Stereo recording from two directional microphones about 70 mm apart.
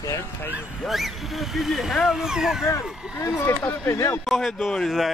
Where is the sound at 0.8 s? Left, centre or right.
Centre.